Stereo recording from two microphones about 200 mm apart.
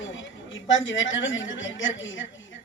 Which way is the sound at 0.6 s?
70° left (ahead or behind).